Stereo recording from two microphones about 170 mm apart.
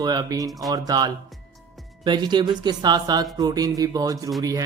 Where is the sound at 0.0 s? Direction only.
25° right (ahead or behind).